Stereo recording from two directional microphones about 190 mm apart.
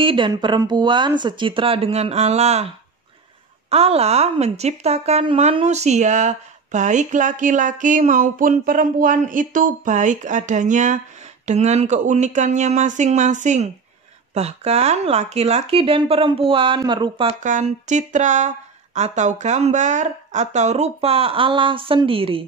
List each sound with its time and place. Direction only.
0.0 s speech: 25° right (ahead or behind)
3.7 s a woman's voice: 30° right (ahead or behind)
17.4 s a woman's voice: 40° right (ahead or behind)